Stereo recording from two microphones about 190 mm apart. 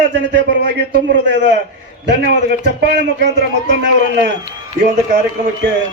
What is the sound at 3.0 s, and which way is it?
Speech, 65° right (ahead or behind).